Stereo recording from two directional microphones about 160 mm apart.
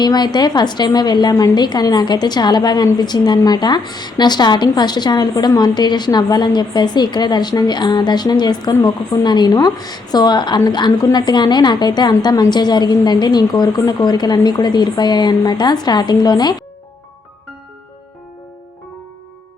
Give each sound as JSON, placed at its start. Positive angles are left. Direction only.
{"t": 0.0, "sound": "a woman's voice", "side_deg": 25}